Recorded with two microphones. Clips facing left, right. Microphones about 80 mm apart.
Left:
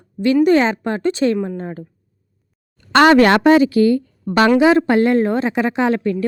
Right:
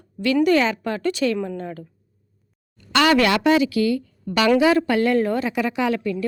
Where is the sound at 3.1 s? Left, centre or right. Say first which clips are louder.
Left 4 dB; left.